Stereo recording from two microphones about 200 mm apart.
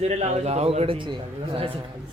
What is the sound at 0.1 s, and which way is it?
A man's voice, 35° right (ahead or behind).